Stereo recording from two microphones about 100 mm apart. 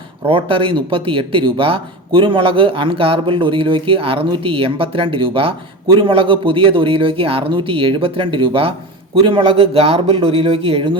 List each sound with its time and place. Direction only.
0.3 s speech: 60° right (ahead or behind)